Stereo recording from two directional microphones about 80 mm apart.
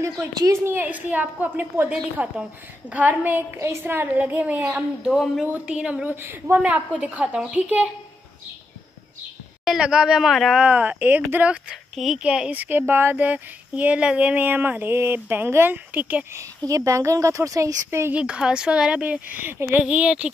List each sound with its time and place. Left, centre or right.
0.5 s a woman's voice: right
0.8 s speech: right
5.1 s speech: centre
5.4 s speech: centre
6.0 s speech: right
6.7 s speech: centre
9.7 s speech: centre
10.6 s speech: centre
11.9 s speech: centre
12.2 s speech: centre
16.3 s a woman's voice: right
18.1 s speech: centre
19.8 s speech: centre